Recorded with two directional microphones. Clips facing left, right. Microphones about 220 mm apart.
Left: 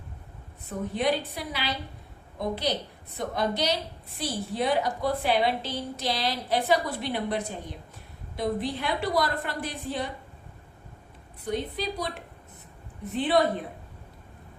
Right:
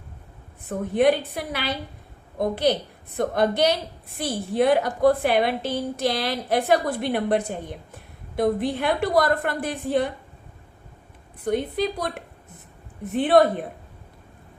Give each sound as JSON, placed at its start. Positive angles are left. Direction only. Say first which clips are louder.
{"t": 0.7, "sound": "a woman's voice", "louder": "right 7 dB", "side_deg": -55}
{"t": 11.4, "sound": "a woman's voice", "louder": "right 6 dB", "side_deg": -50}